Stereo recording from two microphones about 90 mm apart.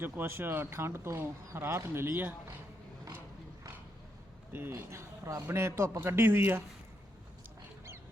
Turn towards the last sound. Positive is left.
turn(degrees=-20)  # may be behind; listen again after turning